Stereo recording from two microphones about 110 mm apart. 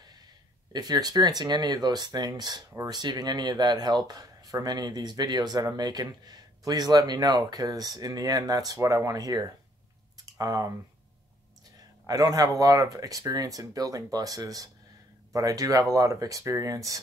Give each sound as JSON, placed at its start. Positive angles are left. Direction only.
{"t": 0.7, "sound": "speech", "side_deg": -40}
{"t": 12.1, "sound": "speech", "side_deg": -35}